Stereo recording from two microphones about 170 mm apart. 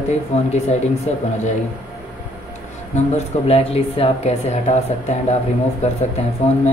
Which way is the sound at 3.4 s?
35° left (ahead or behind).